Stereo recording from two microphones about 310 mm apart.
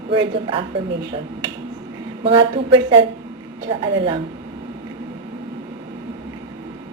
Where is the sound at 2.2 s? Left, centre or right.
Centre.